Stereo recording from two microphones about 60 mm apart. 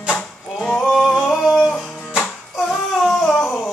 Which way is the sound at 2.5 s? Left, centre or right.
Centre.